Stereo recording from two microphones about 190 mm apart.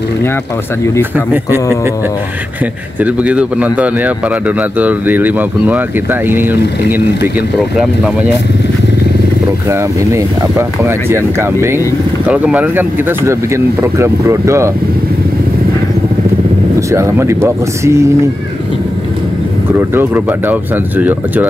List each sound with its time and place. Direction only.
1.1 s a man's voice: 10° right (ahead or behind)
3.0 s a man's voice: 5° right (ahead or behind)
9.7 s a man's voice: 15° right (ahead or behind)
16.9 s a man's voice: 15° right (ahead or behind)
19.9 s a man's voice: 10° right (ahead or behind)